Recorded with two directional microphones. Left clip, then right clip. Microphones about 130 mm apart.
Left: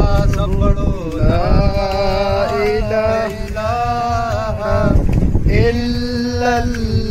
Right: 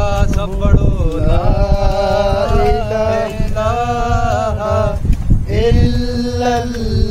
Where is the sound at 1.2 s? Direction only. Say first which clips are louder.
Left 1 dB; centre (ahead or behind).